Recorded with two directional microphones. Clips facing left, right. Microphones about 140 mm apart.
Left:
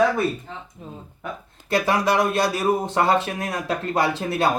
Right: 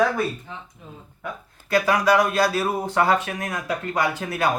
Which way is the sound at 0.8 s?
35° left (ahead or behind).